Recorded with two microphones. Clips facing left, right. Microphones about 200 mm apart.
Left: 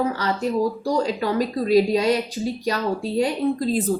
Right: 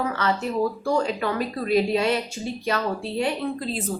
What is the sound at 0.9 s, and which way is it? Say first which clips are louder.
Speech: left 2 dB; 35° left (ahead or behind).